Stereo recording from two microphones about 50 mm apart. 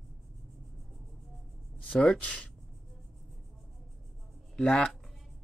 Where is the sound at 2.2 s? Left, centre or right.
Left.